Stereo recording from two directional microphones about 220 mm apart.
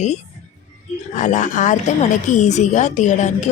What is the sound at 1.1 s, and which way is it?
Speech, 35° left (ahead or behind).